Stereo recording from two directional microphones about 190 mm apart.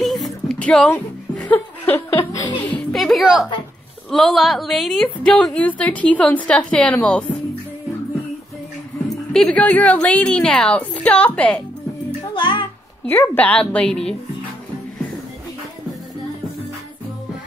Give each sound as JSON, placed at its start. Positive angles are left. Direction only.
{"t": 0.0, "sound": "a sound", "side_deg": 0}
{"t": 1.4, "sound": "laughter", "side_deg": 15}
{"t": 2.7, "sound": "music", "side_deg": 0}
{"t": 4.1, "sound": "a woman's voice", "side_deg": 0}
{"t": 9.3, "sound": "a woman's voice", "side_deg": 5}
{"t": 12.4, "sound": "music", "side_deg": 25}
{"t": 13.0, "sound": "a woman's voice", "side_deg": 10}